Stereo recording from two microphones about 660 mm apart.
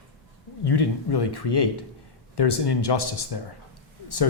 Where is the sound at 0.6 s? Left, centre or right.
Left.